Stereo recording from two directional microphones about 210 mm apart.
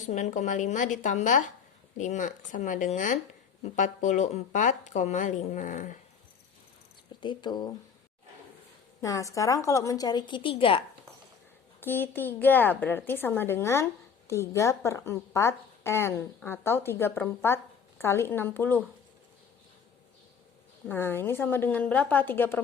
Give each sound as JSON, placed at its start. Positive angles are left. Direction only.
{"t": 0.0, "sound": "a woman's voice", "side_deg": 35}
{"t": 7.2, "sound": "speech", "side_deg": 20}
{"t": 9.0, "sound": "a woman's voice", "side_deg": 15}
{"t": 11.8, "sound": "a woman's voice", "side_deg": 10}
{"t": 20.8, "sound": "a woman's voice", "side_deg": 10}